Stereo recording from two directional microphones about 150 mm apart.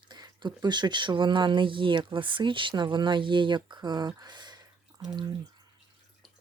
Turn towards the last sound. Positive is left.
turn(degrees=-25)  # may be behind; listen again after turning